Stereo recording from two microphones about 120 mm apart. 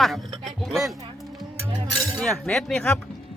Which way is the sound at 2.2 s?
5° left (ahead or behind).